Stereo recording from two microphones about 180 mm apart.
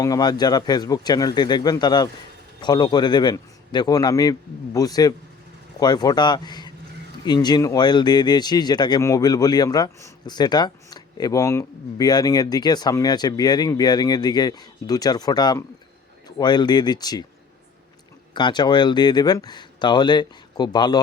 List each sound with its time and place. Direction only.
0.0 s speech: 20° left (ahead or behind)
18.3 s speech: 25° left (ahead or behind)